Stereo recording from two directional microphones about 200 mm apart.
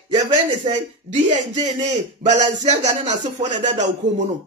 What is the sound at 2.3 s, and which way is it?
A man's voice, 35° right (ahead or behind).